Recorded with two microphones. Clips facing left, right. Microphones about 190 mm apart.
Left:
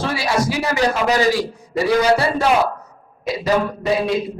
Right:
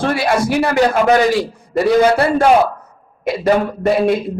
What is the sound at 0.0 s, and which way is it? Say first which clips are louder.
A man's voice: right 4 dB; 55° right (ahead or behind).